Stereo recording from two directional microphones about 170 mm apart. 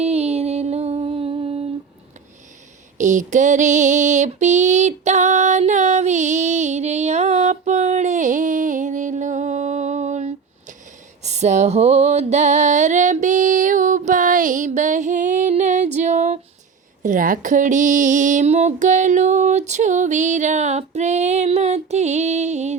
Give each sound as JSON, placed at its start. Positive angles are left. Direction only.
{"t": 0.0, "sound": "music", "side_deg": -35}
{"t": 3.0, "sound": "female singing", "side_deg": -45}
{"t": 11.2, "sound": "music", "side_deg": -40}
{"t": 17.0, "sound": "a sound", "side_deg": -50}